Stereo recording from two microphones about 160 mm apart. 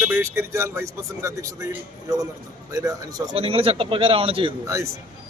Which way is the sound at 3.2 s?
35° right (ahead or behind).